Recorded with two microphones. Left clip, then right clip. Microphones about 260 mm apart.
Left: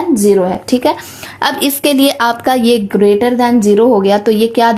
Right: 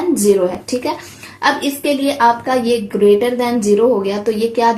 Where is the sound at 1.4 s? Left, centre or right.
Left.